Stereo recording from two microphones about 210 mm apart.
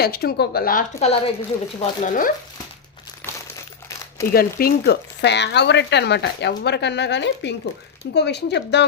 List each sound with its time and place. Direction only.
0.0 s speech: 45° left (ahead or behind)
4.3 s speech: 45° left (ahead or behind)